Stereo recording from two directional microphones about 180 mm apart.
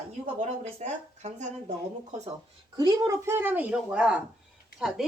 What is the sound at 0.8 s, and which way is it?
Speech, 40° right (ahead or behind).